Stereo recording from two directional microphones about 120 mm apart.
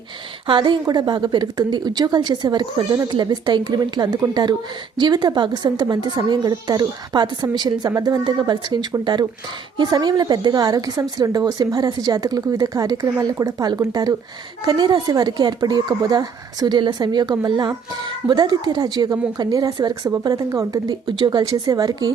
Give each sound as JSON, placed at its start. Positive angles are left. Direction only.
{"t": 0.4, "sound": "a woman's voice", "side_deg": -40}